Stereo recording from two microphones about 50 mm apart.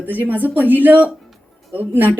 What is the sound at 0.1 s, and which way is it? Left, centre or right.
A woman's voice, right.